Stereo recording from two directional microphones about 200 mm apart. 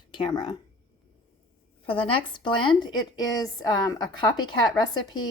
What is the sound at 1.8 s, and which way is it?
A woman's voice, 25° left (ahead or behind).